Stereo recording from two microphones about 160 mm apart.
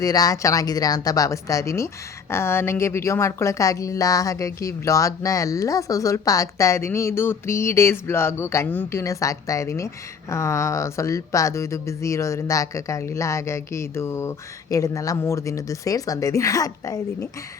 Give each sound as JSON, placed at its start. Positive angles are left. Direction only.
{"t": 0.0, "sound": "a woman's voice", "side_deg": 25}